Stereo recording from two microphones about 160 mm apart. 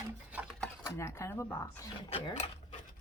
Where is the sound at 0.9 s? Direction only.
15° left (ahead or behind).